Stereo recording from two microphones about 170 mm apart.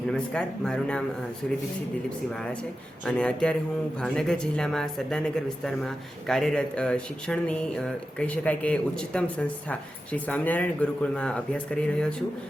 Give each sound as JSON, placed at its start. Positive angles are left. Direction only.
{"t": 0.1, "sound": "speech", "side_deg": 5}
{"t": 2.3, "sound": "speech", "side_deg": 5}